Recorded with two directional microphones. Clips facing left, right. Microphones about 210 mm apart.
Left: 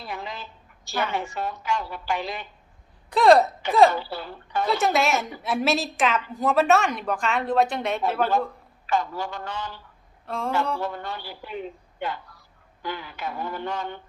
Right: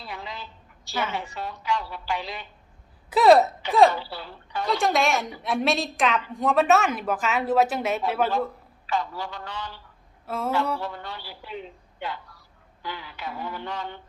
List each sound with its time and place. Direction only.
0.0 s a woman's voice: 45° left (ahead or behind)
3.1 s a woman's voice: 5° right (ahead or behind)
3.9 s a woman's voice: 50° left (ahead or behind)
4.8 s a woman's voice: 5° left (ahead or behind)
8.9 s a woman's voice: 45° left (ahead or behind)
10.2 s a woman's voice: 5° right (ahead or behind)
10.8 s a woman's voice: 50° left (ahead or behind)